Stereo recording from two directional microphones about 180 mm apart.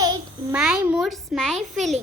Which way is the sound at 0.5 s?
5° right (ahead or behind).